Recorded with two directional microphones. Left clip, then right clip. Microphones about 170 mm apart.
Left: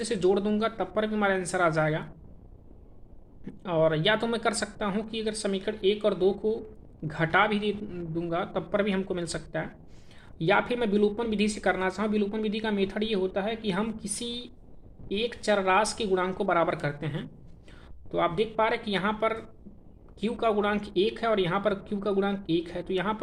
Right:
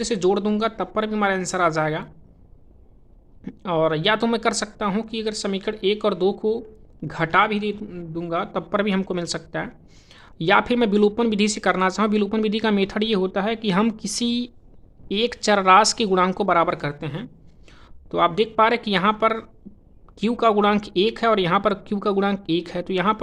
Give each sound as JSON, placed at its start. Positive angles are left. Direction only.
{"t": 0.0, "sound": "speech", "side_deg": -40}
{"t": 3.4, "sound": "speech", "side_deg": -40}
{"t": 7.0, "sound": "speech", "side_deg": -35}
{"t": 17.7, "sound": "speech", "side_deg": -45}